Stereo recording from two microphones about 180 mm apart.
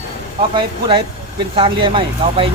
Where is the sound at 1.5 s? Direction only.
30° right (ahead or behind).